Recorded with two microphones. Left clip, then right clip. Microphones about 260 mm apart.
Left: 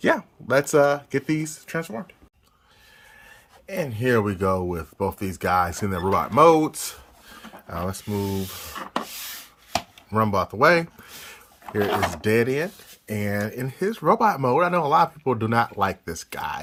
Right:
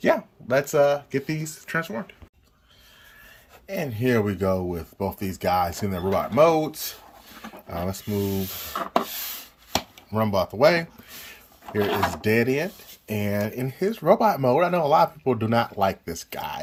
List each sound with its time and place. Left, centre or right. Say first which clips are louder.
0.0 s speech: even; centre
3.7 s speech: left 2 dB; centre
9.7 s speech: left 2 dB; centre